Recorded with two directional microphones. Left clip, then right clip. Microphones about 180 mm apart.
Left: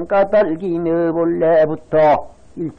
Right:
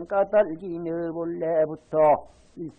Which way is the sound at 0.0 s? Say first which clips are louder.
Left 7 dB; 30° left (ahead or behind).